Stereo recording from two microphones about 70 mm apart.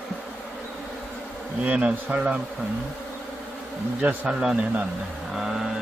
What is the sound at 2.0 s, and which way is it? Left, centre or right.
Speech, centre.